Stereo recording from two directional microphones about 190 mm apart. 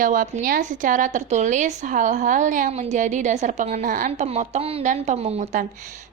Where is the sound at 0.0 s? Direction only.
45° right (ahead or behind).